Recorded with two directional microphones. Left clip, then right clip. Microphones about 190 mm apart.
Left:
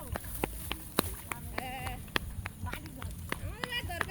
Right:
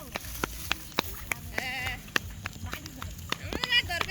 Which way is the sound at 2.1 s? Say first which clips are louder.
Right 2 dB; 30° right (ahead or behind).